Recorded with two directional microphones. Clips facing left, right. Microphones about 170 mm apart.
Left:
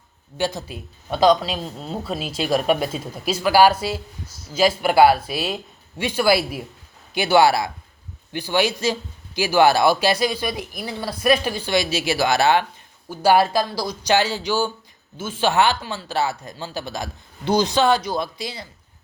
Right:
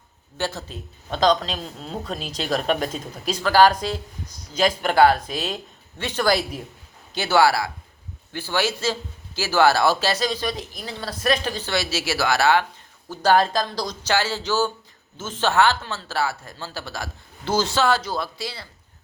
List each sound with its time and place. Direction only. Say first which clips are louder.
0.3 s a man's voice: left 3 dB; 15° left (ahead or behind)